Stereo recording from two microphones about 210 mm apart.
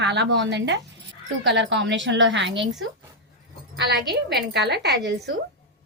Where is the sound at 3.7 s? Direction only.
55° right (ahead or behind).